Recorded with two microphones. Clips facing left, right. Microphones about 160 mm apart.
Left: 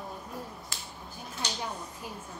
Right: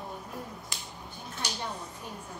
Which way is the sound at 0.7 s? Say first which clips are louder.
Even; 20° right (ahead or behind).